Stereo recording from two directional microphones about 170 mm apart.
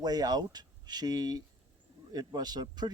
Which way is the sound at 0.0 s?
25° right (ahead or behind).